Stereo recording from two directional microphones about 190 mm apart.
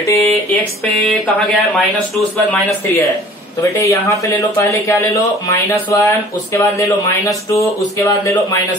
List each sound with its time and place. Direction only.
0.0 s speech: 15° left (ahead or behind)
1.2 s speech: centre (ahead or behind)
2.5 s speech: 15° left (ahead or behind)